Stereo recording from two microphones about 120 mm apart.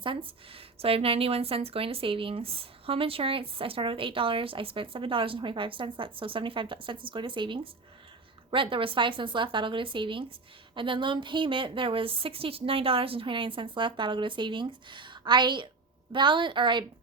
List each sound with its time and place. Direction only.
0.0 s a woman's voice: 45° right (ahead or behind)